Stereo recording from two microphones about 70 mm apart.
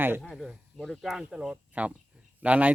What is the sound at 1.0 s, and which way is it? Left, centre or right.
Speech, centre.